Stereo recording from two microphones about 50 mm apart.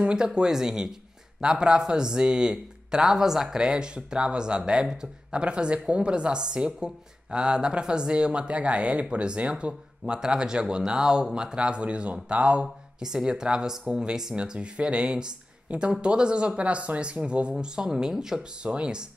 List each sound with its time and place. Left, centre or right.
0.0 s speech: centre